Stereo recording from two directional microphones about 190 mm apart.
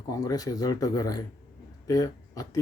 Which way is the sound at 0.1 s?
20° left (ahead or behind).